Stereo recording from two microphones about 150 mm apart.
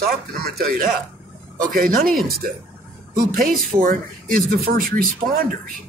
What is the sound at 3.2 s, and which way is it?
Speech, 70° right (ahead or behind).